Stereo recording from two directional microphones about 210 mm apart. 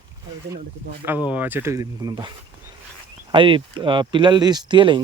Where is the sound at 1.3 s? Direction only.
10° right (ahead or behind).